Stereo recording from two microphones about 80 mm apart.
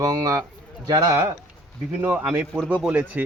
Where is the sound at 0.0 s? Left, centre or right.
Right.